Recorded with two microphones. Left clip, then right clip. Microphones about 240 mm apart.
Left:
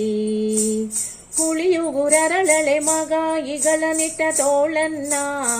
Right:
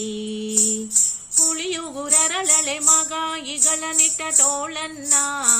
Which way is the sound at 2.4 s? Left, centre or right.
Right.